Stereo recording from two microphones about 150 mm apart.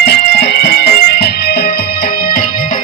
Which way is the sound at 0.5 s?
90° left.